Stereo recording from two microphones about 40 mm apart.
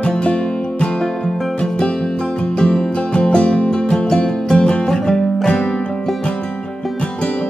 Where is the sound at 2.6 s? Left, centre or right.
Left.